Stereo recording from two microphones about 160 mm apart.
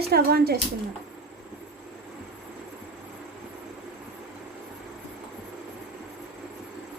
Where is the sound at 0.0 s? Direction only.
80° right.